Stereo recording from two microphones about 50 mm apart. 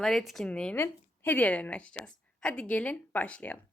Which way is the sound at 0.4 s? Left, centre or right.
Centre.